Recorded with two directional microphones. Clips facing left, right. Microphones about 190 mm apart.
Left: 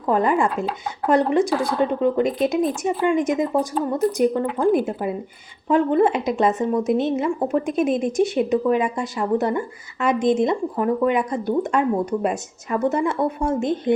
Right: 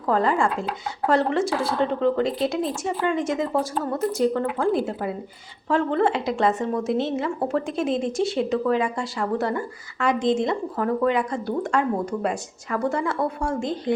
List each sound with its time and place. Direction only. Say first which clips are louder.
0.1 s a woman's voice: left 2 dB; 20° left (ahead or behind)